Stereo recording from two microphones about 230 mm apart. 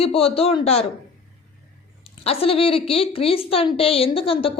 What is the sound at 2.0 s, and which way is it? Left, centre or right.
A woman's voice, left.